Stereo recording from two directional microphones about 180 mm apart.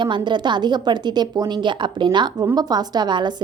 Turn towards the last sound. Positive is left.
turn(degrees=-25)  # may be behind; listen again after turning